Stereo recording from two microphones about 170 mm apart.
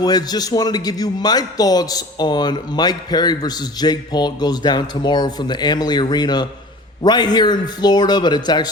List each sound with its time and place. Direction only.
0.0 s a man's voice: 25° left (ahead or behind)